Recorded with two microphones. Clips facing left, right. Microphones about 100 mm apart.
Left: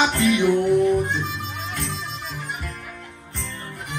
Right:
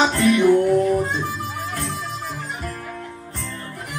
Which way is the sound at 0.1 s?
20° left (ahead or behind).